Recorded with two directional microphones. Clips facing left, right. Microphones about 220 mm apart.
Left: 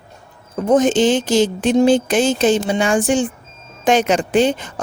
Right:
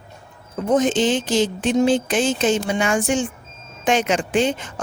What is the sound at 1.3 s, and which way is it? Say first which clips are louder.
A woman's voice: left 4 dB; 40° left (ahead or behind).